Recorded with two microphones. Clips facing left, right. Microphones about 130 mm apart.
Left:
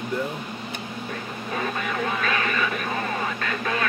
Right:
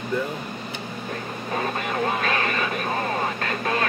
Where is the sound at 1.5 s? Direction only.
40° right (ahead or behind).